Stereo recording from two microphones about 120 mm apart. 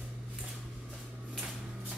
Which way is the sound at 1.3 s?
Centre (ahead or behind).